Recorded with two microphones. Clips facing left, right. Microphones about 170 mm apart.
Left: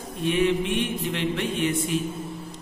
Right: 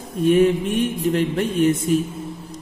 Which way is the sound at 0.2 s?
45° right (ahead or behind).